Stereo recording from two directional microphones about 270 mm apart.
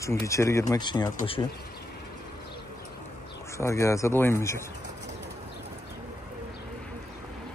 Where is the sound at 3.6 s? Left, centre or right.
Centre.